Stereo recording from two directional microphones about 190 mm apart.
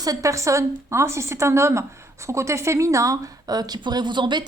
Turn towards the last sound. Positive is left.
turn(degrees=-25)  # may be behind; listen again after turning